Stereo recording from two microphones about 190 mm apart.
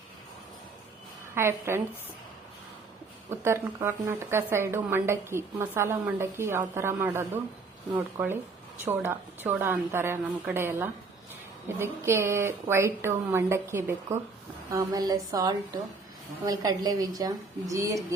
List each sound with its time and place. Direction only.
1.4 s a woman's voice: 15° right (ahead or behind)
3.2 s a woman's voice: 15° right (ahead or behind)